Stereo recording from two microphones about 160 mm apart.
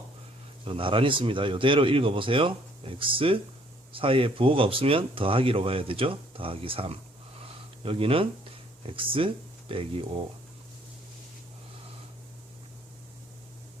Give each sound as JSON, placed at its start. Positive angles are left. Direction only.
{"t": 0.6, "sound": "speech", "side_deg": -35}